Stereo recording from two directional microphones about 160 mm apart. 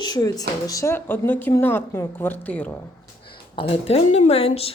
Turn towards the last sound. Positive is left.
turn(degrees=35)  # may be behind; listen again after turning